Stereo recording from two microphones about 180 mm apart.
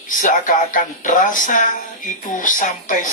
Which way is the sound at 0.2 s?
45° left (ahead or behind).